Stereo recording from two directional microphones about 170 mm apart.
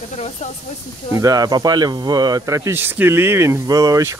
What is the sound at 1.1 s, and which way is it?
Speech, 20° right (ahead or behind).